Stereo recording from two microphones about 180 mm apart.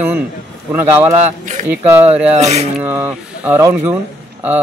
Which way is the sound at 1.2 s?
45° right (ahead or behind).